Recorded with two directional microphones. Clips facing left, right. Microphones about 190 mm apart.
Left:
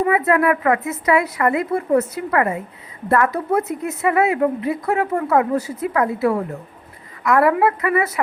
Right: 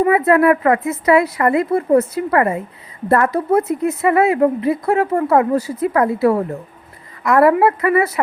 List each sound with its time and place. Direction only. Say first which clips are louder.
0.1 s speech: right 4 dB; 35° right (ahead or behind)